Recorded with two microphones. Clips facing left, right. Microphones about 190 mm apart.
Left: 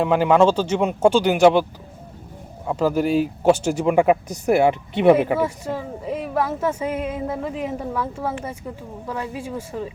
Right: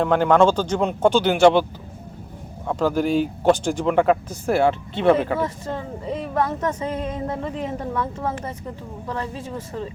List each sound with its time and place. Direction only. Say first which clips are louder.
0.0 s speech: even; 5° left (ahead or behind)
2.6 s speech: left 1 dB; 5° left (ahead or behind)